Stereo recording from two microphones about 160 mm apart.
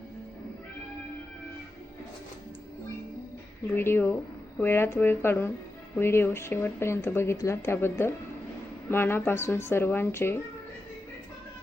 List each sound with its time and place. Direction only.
3.8 s speech: 15° left (ahead or behind)